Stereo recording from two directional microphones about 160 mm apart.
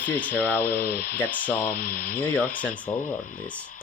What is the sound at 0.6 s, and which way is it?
Speech, 80° left.